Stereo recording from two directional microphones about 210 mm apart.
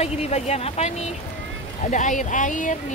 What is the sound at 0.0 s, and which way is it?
Speech, 30° left (ahead or behind).